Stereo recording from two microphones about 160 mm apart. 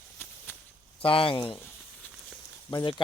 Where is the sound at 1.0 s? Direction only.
35° left (ahead or behind).